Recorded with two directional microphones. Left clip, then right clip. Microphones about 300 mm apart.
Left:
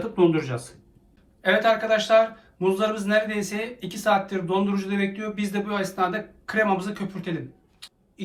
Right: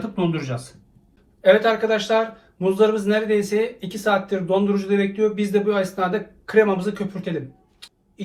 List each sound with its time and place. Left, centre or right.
0.2 s speech: centre